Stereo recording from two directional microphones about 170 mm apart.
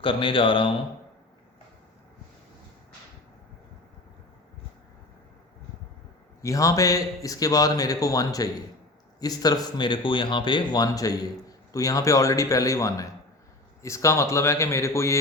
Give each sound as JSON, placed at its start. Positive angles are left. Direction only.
{"t": 0.0, "sound": "speech", "side_deg": 30}
{"t": 6.4, "sound": "a man's voice", "side_deg": 20}